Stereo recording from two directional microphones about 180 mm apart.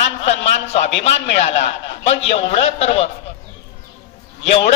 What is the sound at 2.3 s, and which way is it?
Speech, 35° left (ahead or behind).